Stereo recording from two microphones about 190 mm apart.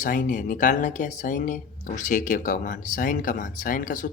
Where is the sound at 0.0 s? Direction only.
45° left (ahead or behind).